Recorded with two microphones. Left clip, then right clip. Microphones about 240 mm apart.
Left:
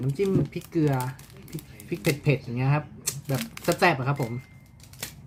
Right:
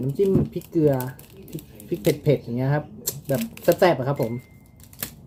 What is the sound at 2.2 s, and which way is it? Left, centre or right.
Speech, centre.